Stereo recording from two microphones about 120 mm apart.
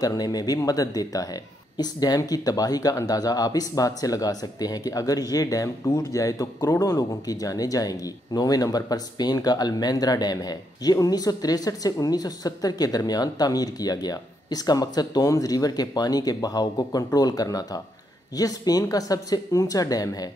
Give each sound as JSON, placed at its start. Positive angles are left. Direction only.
{"t": 0.0, "sound": "speech", "side_deg": 35}